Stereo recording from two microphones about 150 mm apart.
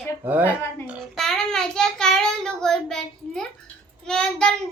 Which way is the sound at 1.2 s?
5° left (ahead or behind).